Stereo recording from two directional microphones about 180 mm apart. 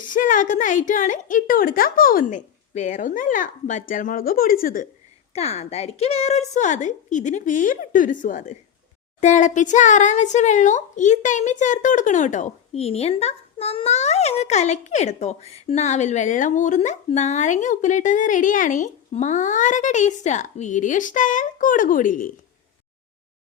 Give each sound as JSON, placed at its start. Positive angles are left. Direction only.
{"t": 0.0, "sound": "speech", "side_deg": 50}
{"t": 5.3, "sound": "speech", "side_deg": 35}